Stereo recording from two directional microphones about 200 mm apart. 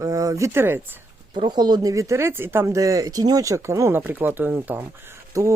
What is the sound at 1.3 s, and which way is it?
Speech, 25° right (ahead or behind).